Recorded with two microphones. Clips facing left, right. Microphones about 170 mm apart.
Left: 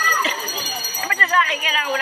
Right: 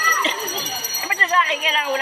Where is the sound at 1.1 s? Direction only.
20° right (ahead or behind).